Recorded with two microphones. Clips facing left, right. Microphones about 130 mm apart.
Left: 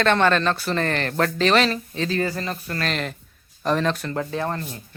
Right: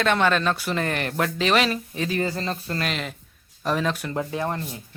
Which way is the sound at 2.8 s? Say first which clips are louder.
Left 2 dB; 5° right (ahead or behind).